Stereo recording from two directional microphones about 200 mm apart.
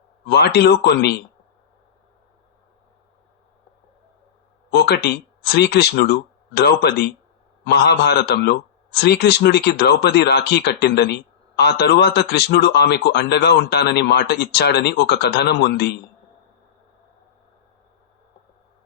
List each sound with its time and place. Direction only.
0.3 s a man's voice: 55° left (ahead or behind)
4.7 s a man's voice: 55° left (ahead or behind)